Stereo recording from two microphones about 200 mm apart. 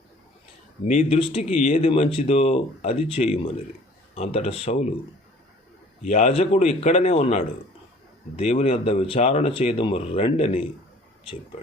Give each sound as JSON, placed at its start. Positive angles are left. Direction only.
{"t": 1.0, "sound": "speech", "side_deg": 25}
{"t": 6.0, "sound": "a man's voice", "side_deg": 35}